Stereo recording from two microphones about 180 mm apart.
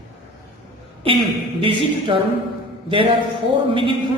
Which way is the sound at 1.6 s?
30° right (ahead or behind).